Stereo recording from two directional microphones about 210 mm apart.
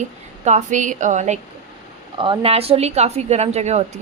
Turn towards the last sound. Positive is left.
turn(degrees=-30)  # may be behind; listen again after turning